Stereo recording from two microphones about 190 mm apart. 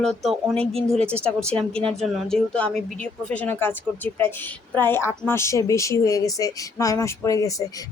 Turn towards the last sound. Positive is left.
turn(degrees=15)  # may be behind; listen again after turning